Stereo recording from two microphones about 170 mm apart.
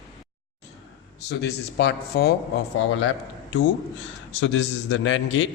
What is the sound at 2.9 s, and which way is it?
A man's voice, 90° left.